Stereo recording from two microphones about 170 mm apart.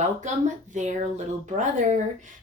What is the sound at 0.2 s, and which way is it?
Speech, 45° right (ahead or behind).